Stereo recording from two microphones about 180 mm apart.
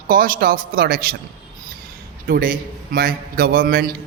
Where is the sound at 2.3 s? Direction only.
50° right (ahead or behind).